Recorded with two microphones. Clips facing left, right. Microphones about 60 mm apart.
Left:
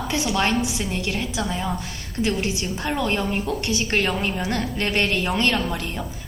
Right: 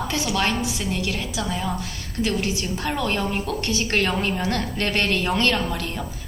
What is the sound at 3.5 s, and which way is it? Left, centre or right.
A woman's voice, left.